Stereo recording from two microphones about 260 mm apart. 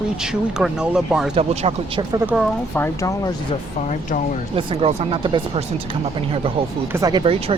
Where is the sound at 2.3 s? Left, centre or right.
Centre.